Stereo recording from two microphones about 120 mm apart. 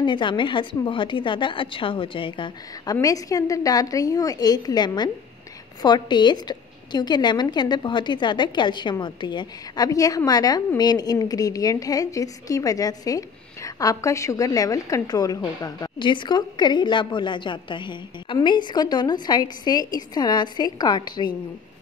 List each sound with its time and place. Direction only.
0.0 s a woman's voice: 40° left (ahead or behind)
2.9 s a woman's voice: 30° left (ahead or behind)